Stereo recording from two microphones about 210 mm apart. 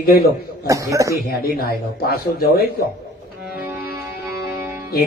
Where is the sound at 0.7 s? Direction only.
15° right (ahead or behind).